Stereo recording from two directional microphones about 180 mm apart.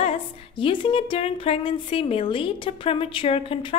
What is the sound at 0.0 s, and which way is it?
A woman's voice, 30° left (ahead or behind).